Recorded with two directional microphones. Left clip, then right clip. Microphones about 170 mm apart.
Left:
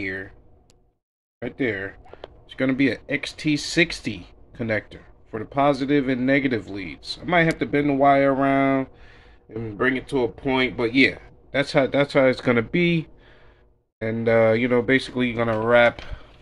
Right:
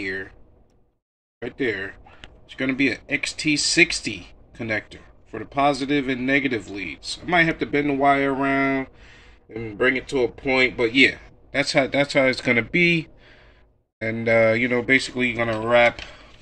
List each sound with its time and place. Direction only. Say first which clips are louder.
0.0 s speech: right 1 dB; 20° left (ahead or behind)
1.4 s speech: even; 25° left (ahead or behind)